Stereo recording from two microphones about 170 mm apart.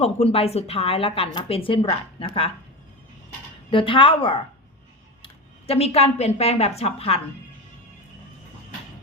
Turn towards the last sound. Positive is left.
turn(degrees=35)  # may be behind; listen again after turning